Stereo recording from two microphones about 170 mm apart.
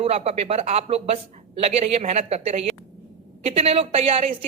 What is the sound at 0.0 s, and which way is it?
A woman's voice, 35° right (ahead or behind).